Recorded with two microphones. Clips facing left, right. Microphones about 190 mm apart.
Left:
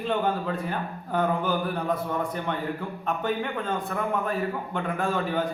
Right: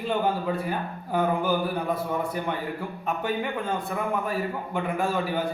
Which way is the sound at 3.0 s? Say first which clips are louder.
Even; 5° right (ahead or behind).